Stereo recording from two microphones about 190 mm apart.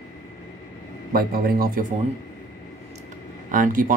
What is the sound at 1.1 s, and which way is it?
Speech, 50° right (ahead or behind).